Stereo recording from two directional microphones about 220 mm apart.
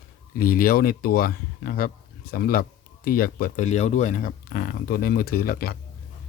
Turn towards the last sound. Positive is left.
turn(degrees=45)  # may be behind; listen again after turning